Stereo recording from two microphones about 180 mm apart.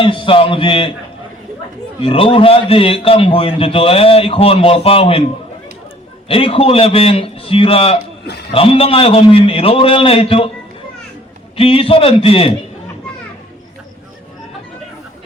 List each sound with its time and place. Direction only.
0.0 s a man's voice: 30° left (ahead or behind)
2.0 s a man's voice: 30° left (ahead or behind)
6.2 s a man's voice: 30° left (ahead or behind)
11.5 s a man's voice: 30° left (ahead or behind)